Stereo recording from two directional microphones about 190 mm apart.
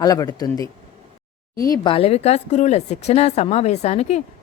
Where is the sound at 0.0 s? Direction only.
20° left (ahead or behind).